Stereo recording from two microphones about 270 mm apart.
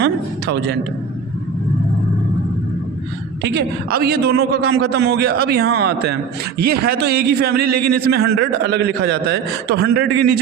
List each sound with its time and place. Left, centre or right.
0.0 s a sound: right
3.4 s a man's voice: right
4.5 s speech: right
4.9 s a man's voice: right
7.7 s a man's voice: right
7.9 s a man's voice: right